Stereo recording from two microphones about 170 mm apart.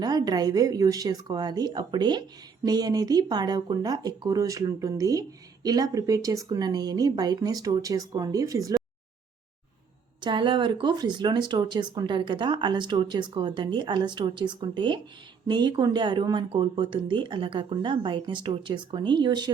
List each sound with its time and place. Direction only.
0.0 s speech: 25° right (ahead or behind)
10.2 s speech: 30° right (ahead or behind)